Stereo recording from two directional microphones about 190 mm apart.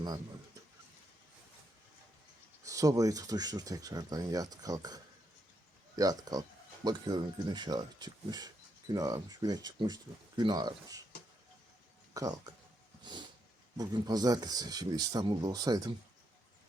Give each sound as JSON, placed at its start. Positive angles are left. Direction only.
{"t": 2.6, "sound": "speech", "side_deg": -20}
{"t": 6.0, "sound": "speech", "side_deg": -20}
{"t": 12.1, "sound": "speech", "side_deg": -20}